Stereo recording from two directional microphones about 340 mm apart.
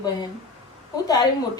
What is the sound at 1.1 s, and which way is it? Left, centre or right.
Speech, centre.